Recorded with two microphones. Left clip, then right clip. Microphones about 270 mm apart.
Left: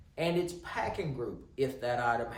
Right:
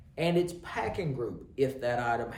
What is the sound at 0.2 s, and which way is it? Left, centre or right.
Speech, centre.